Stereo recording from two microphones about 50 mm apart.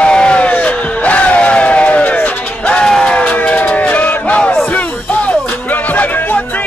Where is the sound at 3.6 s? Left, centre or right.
Left.